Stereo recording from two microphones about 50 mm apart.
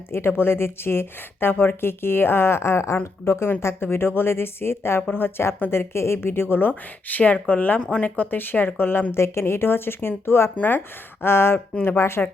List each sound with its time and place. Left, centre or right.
0.1 s a woman's voice: left
3.3 s speech: left
3.6 s a woman's voice: left
5.7 s a woman's voice: left
9.1 s speech: left
10.6 s speech: left
11.2 s a woman's voice: left